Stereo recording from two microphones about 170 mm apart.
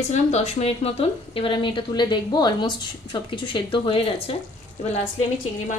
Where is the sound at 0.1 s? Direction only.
40° left (ahead or behind).